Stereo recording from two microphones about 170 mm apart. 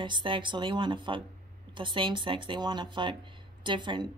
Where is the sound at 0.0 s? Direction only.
30° right (ahead or behind).